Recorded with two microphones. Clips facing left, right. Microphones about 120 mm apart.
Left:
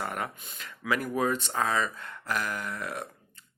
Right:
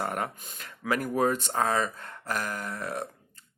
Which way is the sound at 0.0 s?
40° right (ahead or behind).